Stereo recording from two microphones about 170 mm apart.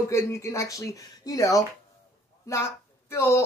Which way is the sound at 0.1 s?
15° left (ahead or behind).